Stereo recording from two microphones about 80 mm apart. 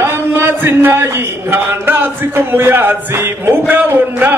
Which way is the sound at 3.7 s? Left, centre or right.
Right.